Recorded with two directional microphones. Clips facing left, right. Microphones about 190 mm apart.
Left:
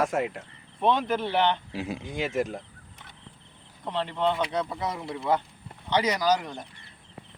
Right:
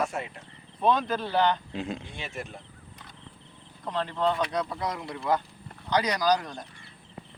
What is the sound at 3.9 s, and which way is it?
Speech, 20° left (ahead or behind).